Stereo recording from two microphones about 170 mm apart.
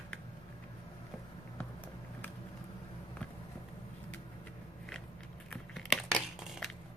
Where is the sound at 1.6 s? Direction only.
10° left (ahead or behind).